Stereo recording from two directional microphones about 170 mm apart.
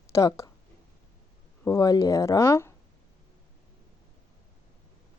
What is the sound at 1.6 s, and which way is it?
Speech, 20° left (ahead or behind).